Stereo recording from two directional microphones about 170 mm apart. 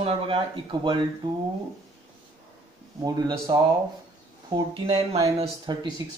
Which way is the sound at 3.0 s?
20° right (ahead or behind).